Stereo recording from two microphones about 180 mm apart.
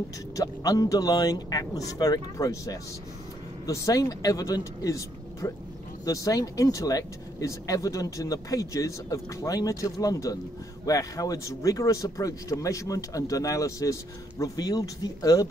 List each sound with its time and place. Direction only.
0.4 s speech: 20° left (ahead or behind)